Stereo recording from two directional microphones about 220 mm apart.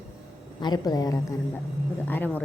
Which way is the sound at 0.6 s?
20° left (ahead or behind).